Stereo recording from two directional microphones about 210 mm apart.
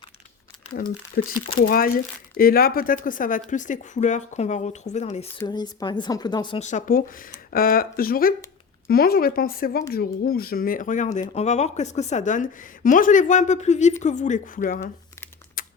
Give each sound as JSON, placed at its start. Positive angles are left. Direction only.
{"t": 0.7, "sound": "speech", "side_deg": 45}
{"t": 5.4, "sound": "a woman's voice", "side_deg": 20}
{"t": 6.6, "sound": "speech", "side_deg": 35}
{"t": 15.6, "sound": "a sound", "side_deg": 45}